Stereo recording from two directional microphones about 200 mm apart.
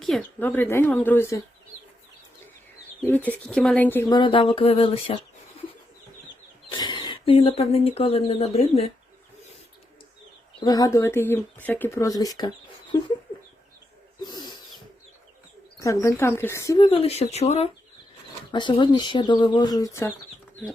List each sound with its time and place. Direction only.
0.0 s speech: 5° left (ahead or behind)
3.0 s speech: 10° left (ahead or behind)
4.1 s speech: 25° left (ahead or behind)
6.7 s speech: 20° left (ahead or behind)
10.6 s speech: 20° left (ahead or behind)
14.2 s owl: 20° left (ahead or behind)
15.8 s speech: 15° left (ahead or behind)